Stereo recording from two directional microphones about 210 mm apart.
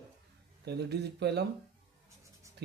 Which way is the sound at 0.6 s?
55° right (ahead or behind).